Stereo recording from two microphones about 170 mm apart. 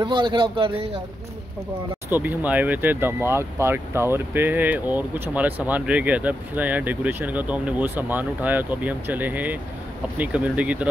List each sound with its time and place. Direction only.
0.0 s a man's voice: 25° right (ahead or behind)
2.0 s speech: 10° right (ahead or behind)